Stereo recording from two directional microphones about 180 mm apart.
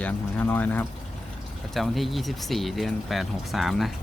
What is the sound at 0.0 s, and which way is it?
Speech, 10° left (ahead or behind).